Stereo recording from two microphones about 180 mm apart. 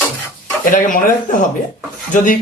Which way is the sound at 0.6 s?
50° left (ahead or behind).